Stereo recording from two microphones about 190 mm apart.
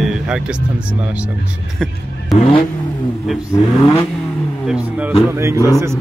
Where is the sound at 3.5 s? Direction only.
15° left (ahead or behind).